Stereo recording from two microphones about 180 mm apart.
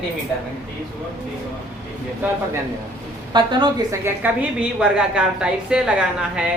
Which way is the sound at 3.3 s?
25° right (ahead or behind).